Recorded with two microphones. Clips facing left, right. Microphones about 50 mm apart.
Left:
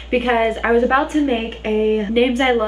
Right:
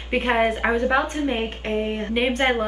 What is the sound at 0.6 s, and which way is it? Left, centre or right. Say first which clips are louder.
Speech: left 5 dB; centre.